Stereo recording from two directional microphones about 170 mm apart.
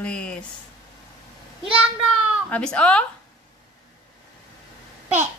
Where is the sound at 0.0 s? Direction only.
5° left (ahead or behind).